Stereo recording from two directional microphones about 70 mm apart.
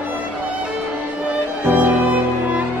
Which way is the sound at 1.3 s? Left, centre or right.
Centre.